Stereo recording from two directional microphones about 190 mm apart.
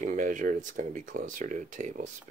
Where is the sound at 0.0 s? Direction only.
45° right (ahead or behind).